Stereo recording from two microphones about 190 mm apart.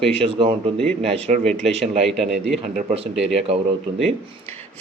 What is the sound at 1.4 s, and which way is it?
Speech, 5° left (ahead or behind).